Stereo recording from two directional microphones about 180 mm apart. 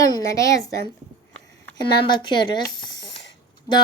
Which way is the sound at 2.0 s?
25° left (ahead or behind).